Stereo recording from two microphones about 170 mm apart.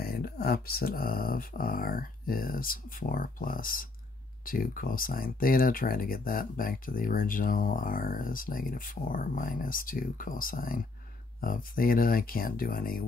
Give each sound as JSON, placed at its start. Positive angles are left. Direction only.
{"t": 0.0, "sound": "speech", "side_deg": 65}